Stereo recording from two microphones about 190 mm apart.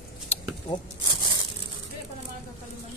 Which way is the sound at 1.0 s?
20° right (ahead or behind).